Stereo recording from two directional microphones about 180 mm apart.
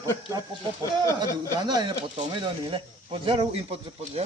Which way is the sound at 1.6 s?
25° right (ahead or behind).